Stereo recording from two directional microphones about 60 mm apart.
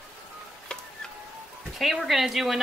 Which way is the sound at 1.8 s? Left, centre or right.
Centre.